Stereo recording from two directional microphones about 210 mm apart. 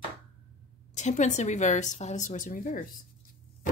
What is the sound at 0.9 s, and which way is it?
A woman's voice, 35° left (ahead or behind).